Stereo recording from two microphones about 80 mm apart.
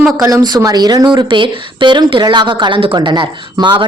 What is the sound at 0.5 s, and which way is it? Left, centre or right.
Speech, right.